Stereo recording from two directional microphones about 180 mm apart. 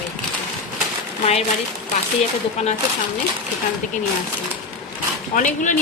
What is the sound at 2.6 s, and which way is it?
Speech, 40° left (ahead or behind).